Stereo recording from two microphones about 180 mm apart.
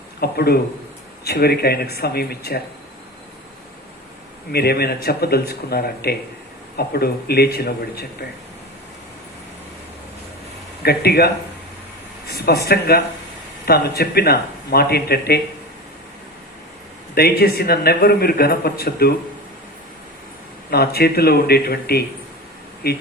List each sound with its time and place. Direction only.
0.2 s a man's voice: 60° left (ahead or behind)
4.5 s a man's voice: 60° left (ahead or behind)
10.8 s a man's voice: 60° left (ahead or behind)
12.3 s a man's voice: 60° left (ahead or behind)
17.2 s a man's voice: 60° left (ahead or behind)
20.7 s a man's voice: 60° left (ahead or behind)